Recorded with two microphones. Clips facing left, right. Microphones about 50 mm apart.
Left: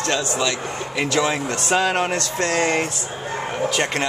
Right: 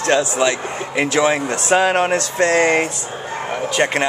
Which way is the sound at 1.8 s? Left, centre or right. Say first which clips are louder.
Right 4 dB; centre.